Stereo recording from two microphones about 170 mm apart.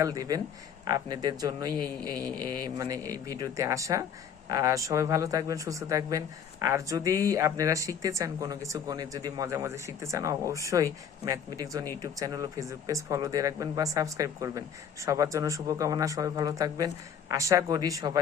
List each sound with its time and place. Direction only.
0.0 s speech: 20° right (ahead or behind)